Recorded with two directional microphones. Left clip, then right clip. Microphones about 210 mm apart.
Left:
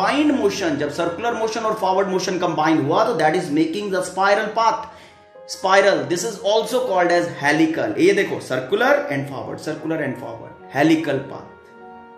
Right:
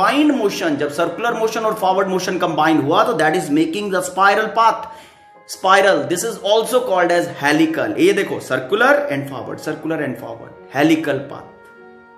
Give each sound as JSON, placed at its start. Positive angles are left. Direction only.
{"t": 0.0, "sound": "speech", "side_deg": -20}